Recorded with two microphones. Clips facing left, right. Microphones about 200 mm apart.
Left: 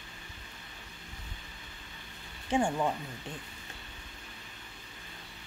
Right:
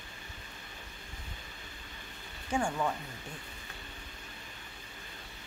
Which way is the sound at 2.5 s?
20° left (ahead or behind).